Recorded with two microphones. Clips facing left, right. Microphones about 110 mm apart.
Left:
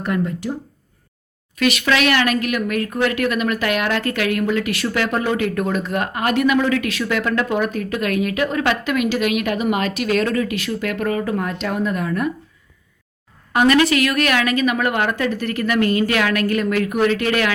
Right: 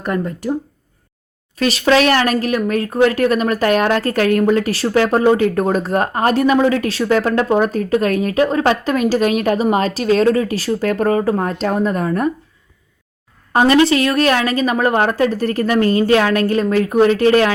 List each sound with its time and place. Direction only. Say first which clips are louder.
0.0 s speech: right 1 dB; 45° right (ahead or behind)
1.5 s speech: right 4 dB; 30° right (ahead or behind)
13.5 s speech: right 3 dB; 30° right (ahead or behind)